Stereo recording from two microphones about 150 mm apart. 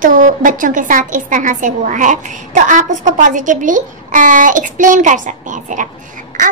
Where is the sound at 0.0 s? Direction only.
60° right (ahead or behind).